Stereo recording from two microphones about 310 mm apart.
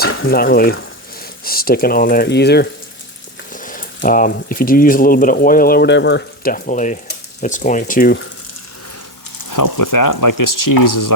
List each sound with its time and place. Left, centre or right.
0.0 s speech: left
9.5 s speech: left